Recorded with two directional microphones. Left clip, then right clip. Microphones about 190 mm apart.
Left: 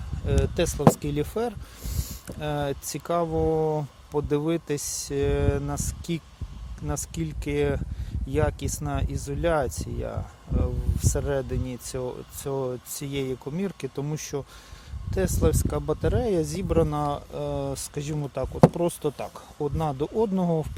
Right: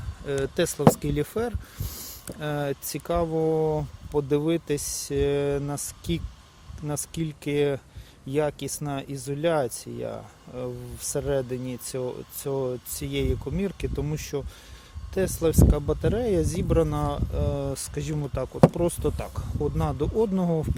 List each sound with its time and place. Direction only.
0.3 s speech: centre (ahead or behind)